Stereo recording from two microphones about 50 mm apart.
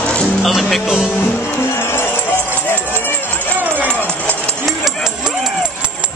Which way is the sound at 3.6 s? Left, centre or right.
Right.